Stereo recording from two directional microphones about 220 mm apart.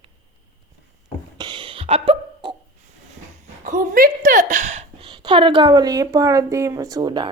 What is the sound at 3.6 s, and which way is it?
A woman's voice, 35° right (ahead or behind).